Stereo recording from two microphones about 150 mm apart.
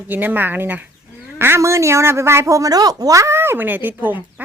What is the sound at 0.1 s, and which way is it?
A woman's voice, 10° right (ahead or behind).